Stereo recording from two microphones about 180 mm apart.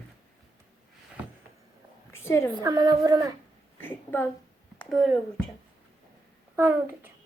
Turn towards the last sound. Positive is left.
turn(degrees=-10)  # may be behind; listen again after turning